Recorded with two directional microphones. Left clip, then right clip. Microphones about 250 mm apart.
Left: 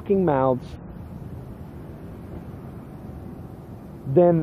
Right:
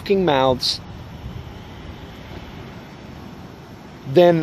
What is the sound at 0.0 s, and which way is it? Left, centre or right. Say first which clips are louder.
Speech: right 4 dB; centre.